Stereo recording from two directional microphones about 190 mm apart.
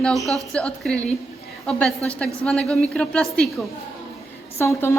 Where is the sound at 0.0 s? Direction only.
Centre (ahead or behind).